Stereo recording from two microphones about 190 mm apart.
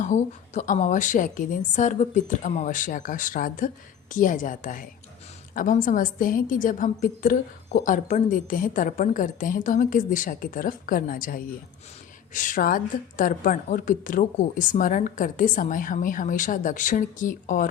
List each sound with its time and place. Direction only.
0.0 s a woman's voice: 40° left (ahead or behind)